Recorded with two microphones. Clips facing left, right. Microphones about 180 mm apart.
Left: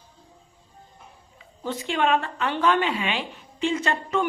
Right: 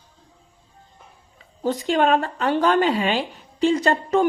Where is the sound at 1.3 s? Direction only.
40° right (ahead or behind).